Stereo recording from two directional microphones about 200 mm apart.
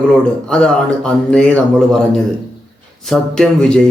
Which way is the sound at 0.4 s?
5° left (ahead or behind).